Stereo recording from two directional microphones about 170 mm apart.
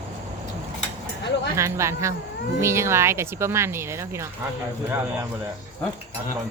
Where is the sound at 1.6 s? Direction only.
15° right (ahead or behind).